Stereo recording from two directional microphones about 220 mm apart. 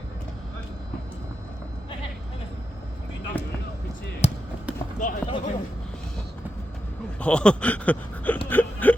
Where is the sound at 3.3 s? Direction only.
5° left (ahead or behind).